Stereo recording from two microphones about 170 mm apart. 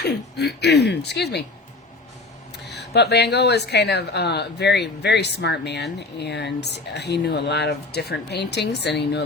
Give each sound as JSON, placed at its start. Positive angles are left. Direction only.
{"t": 0.3, "sound": "speech", "side_deg": 80}
{"t": 2.6, "sound": "speech", "side_deg": 80}